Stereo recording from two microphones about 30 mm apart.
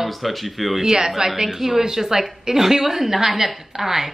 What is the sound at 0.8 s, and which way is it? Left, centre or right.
Speech, centre.